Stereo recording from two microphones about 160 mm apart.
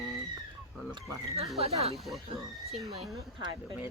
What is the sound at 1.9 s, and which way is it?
Speech, centre (ahead or behind).